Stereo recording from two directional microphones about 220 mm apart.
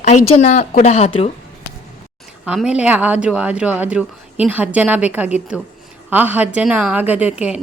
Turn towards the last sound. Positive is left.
turn(degrees=-5)  # may be behind; listen again after turning